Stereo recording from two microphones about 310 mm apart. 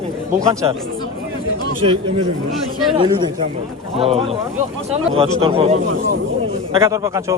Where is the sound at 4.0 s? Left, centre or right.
Centre.